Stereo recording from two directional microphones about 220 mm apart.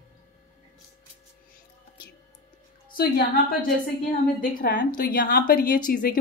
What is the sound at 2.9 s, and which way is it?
Speech, 45° left (ahead or behind).